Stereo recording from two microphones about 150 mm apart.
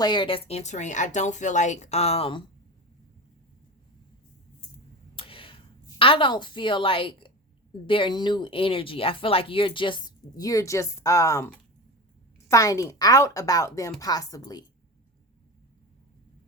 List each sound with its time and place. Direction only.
0.0 s a woman's voice: 30° left (ahead or behind)
5.1 s a sound: 35° left (ahead or behind)
6.0 s speech: 35° left (ahead or behind)
12.5 s a woman's voice: 20° left (ahead or behind)